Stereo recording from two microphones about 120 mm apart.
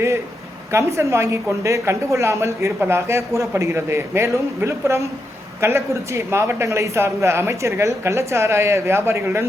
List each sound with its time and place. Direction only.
0.7 s a woman's voice: 25° right (ahead or behind)